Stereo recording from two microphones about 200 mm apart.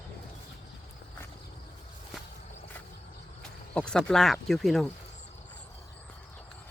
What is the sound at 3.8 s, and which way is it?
Speech, 5° left (ahead or behind).